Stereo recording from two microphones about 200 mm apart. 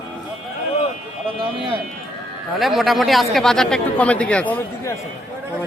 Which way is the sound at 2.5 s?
Centre (ahead or behind).